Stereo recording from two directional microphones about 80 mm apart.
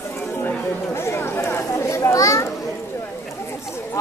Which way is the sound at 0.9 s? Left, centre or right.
Left.